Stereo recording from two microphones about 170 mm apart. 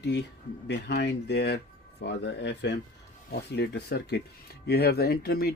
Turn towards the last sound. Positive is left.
turn(degrees=65)  # may be behind; listen again after turning